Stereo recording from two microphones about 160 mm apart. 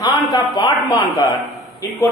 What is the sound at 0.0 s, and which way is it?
A man's voice, 25° left (ahead or behind).